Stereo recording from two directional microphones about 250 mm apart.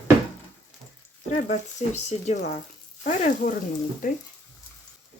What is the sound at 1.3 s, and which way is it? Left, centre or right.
Speech, left.